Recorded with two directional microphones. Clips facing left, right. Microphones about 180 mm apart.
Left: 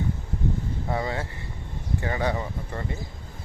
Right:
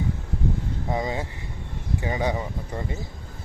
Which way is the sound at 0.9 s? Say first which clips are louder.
Right 2 dB; 15° right (ahead or behind).